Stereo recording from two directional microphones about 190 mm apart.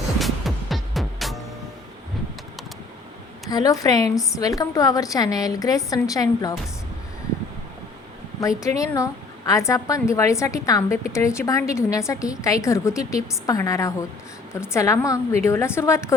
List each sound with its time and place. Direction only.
0.2 s music: centre (ahead or behind)
3.5 s a woman's voice: 20° left (ahead or behind)
8.4 s a woman's voice: 15° left (ahead or behind)